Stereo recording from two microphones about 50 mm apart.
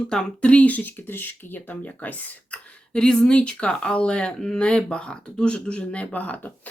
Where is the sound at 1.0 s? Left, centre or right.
Left.